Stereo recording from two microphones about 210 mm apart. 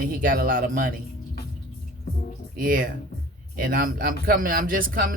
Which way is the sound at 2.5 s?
40° right (ahead or behind).